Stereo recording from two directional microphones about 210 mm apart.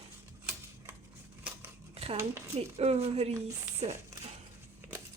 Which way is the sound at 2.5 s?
30° right (ahead or behind).